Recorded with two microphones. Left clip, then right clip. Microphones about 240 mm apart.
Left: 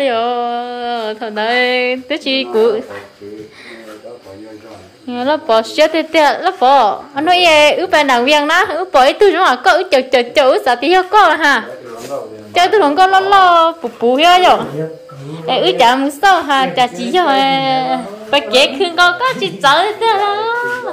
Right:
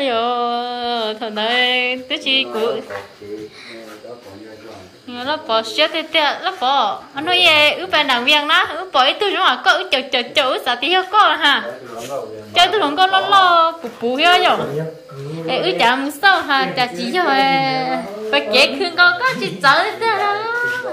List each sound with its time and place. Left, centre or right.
0.0 s music: centre; by 2.8 s left
5.1 s a woman's voice: left; by 20.5 s centre